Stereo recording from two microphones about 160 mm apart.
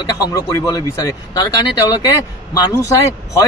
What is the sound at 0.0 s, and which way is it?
Speech, 20° left (ahead or behind).